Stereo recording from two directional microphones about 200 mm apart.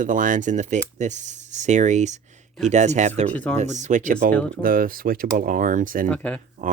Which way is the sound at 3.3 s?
10° left (ahead or behind).